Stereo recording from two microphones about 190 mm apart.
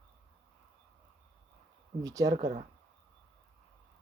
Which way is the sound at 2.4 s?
35° right (ahead or behind).